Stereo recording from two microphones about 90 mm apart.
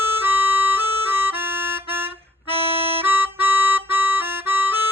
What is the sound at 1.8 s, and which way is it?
Music, 25° right (ahead or behind).